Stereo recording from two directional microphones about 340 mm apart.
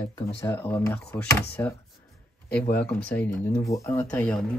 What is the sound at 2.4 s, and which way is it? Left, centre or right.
Speech, left.